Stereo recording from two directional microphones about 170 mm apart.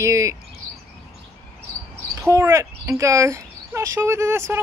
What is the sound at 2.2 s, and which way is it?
Speech, 15° right (ahead or behind).